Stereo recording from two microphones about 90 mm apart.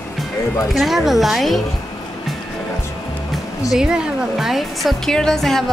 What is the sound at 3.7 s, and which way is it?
A woman's voice, 5° right (ahead or behind).